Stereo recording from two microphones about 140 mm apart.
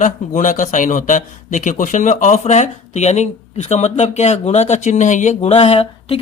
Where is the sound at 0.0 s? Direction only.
65° left (ahead or behind).